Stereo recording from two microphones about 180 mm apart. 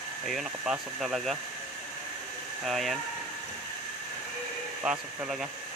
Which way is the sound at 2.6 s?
Centre (ahead or behind).